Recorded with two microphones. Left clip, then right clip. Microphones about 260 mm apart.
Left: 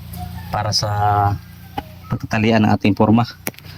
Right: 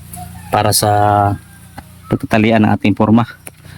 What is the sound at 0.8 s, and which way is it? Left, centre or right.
Speech, right.